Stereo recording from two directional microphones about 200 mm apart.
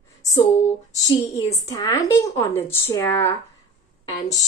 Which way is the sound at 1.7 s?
15° left (ahead or behind).